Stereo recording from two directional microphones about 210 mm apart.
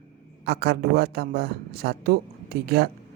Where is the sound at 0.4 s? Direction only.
50° right (ahead or behind).